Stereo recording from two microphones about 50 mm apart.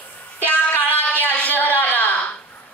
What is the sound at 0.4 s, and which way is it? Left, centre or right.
Music, left.